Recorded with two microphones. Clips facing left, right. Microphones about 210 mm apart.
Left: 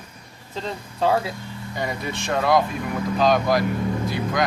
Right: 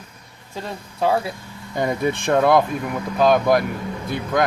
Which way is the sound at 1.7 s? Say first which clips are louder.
Right 7 dB; 50° right (ahead or behind).